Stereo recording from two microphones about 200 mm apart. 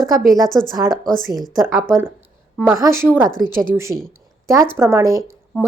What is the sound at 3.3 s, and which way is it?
Speech, 45° right (ahead or behind).